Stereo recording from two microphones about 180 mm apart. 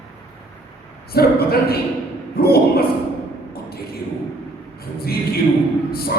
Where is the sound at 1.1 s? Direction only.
60° left (ahead or behind).